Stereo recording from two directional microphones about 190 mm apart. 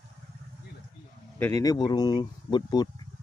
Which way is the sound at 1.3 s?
15° left (ahead or behind).